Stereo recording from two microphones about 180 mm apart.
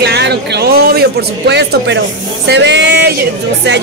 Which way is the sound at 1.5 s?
70° right (ahead or behind).